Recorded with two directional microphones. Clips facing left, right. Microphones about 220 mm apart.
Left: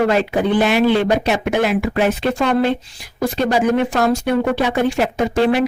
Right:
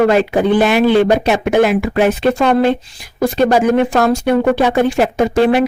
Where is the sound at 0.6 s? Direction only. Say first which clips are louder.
Right 3 dB; 50° right (ahead or behind).